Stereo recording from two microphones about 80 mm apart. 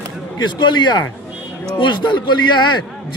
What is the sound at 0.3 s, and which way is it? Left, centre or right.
A man's voice, left.